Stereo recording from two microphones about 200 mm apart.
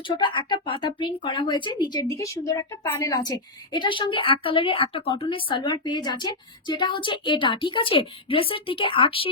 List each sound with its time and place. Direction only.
0.2 s speech: 25° left (ahead or behind)